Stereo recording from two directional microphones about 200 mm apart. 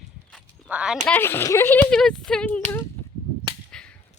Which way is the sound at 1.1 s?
10° left (ahead or behind).